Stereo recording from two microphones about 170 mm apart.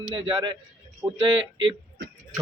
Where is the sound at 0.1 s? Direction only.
30° right (ahead or behind).